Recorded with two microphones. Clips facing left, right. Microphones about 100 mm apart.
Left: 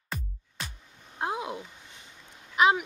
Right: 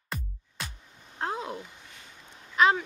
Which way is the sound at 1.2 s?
15° left (ahead or behind).